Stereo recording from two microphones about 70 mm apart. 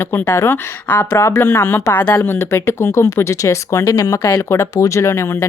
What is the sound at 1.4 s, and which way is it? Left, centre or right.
Speech, left.